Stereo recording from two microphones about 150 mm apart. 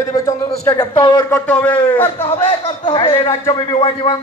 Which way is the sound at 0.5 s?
40° left (ahead or behind).